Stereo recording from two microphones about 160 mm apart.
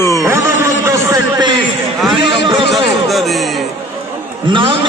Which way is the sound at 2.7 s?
Centre (ahead or behind).